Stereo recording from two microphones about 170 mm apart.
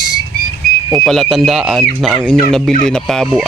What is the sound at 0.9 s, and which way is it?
Speech, centre (ahead or behind).